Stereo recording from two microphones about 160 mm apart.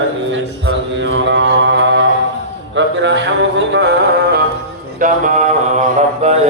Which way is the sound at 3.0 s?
90° right.